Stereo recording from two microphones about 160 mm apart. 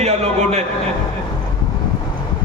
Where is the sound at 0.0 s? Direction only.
40° right (ahead or behind).